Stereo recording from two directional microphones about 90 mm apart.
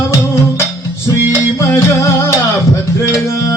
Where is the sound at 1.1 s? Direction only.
35° left (ahead or behind).